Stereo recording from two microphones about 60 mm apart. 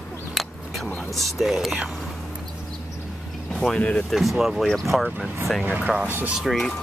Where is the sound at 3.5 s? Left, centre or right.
Centre.